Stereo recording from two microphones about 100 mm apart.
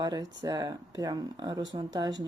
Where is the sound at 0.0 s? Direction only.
40° right (ahead or behind).